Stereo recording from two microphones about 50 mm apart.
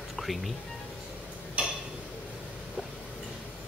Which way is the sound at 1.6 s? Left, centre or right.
Right.